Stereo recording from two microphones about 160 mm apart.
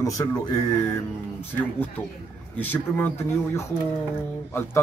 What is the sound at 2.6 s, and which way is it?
Speech, 10° left (ahead or behind).